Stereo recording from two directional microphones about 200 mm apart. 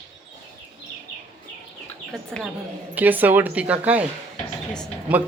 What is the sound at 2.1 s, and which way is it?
Speech, 5° left (ahead or behind).